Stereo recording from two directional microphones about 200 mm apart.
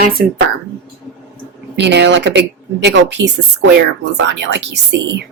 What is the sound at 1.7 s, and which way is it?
A woman's voice, 60° right (ahead or behind).